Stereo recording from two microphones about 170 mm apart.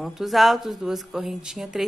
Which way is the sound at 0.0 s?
Centre (ahead or behind).